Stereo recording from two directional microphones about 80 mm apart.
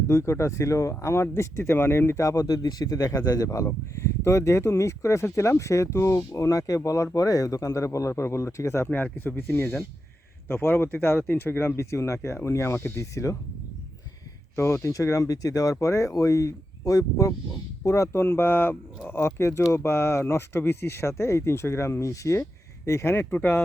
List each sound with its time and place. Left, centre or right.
0.1 s speech: left
3.7 s speech: left
8.9 s speech: left
14.5 s speech: left